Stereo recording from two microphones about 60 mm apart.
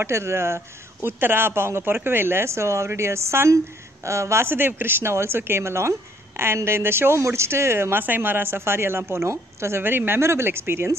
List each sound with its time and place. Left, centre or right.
0.0 s speech: right
8.0 s speech: right